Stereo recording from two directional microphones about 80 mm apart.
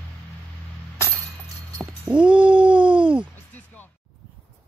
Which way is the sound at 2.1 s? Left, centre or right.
Right.